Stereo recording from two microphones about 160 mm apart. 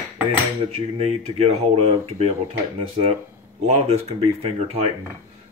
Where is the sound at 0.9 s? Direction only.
40° right (ahead or behind).